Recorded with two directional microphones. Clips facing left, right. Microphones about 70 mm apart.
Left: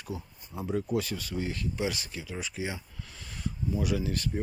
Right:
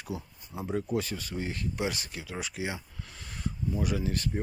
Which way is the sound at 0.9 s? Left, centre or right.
Right.